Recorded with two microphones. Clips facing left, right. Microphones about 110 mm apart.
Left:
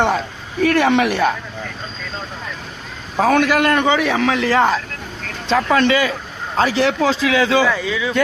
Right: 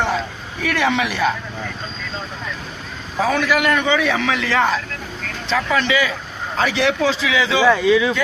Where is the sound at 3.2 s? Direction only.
60° left (ahead or behind).